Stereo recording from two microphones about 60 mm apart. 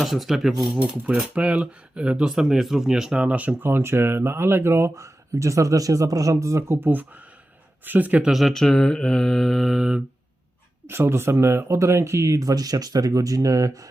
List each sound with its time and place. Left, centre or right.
0.0 s speech: centre
1.4 s speech: centre
3.6 s speech: right
8.2 s speech: centre
8.5 s mantra: centre
10.8 s speech: right
12.4 s speech: right